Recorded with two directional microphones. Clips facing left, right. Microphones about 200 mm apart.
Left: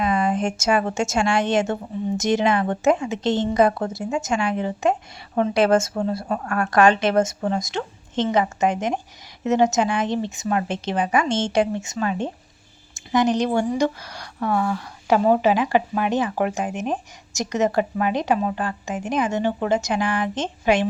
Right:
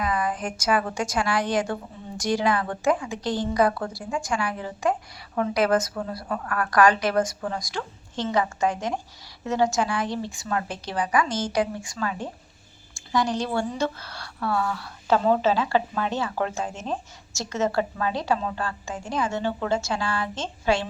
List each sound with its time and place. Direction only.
0.0 s a woman's voice: 25° left (ahead or behind)